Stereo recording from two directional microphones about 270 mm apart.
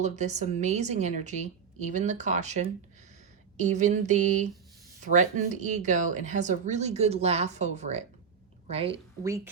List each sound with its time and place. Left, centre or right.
0.0 s a woman's voice: right